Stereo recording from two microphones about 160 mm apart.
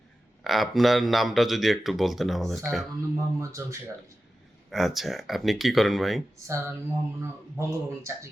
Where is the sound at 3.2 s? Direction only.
20° right (ahead or behind).